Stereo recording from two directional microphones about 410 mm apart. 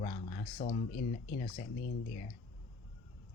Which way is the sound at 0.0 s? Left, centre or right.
Centre.